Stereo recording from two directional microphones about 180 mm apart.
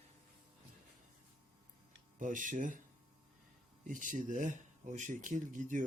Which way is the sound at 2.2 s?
45° right (ahead or behind).